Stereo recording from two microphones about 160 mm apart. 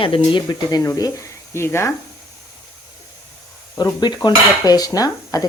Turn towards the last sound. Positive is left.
turn(degrees=25)  # may be behind; listen again after turning